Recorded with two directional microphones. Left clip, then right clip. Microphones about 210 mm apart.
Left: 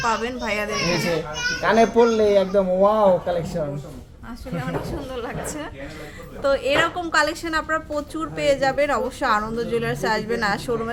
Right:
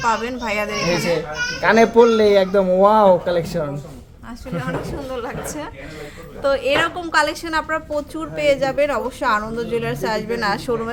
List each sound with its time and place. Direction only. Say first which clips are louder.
0.0 s a child's voice: right 3 dB; 5° right (ahead or behind)
1.6 s a man's voice: right 4 dB; 25° right (ahead or behind)
4.5 s a child's voice: right 3 dB; 10° right (ahead or behind)